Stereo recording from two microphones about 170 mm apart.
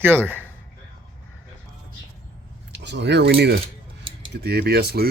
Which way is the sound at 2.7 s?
90° right.